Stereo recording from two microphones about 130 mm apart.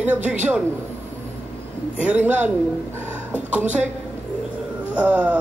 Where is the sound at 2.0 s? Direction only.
10° right (ahead or behind).